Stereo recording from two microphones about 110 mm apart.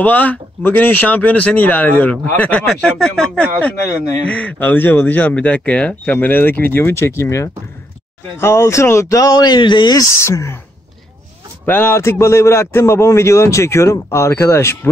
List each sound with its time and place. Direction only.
0.0 s speech: 15° left (ahead or behind); by 10.0 s 40° left (ahead or behind)
10.2 s a man's voice: 25° left (ahead or behind)
11.6 s a man's voice: 20° left (ahead or behind)